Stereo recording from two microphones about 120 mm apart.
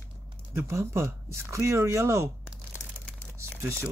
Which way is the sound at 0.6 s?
20° right (ahead or behind).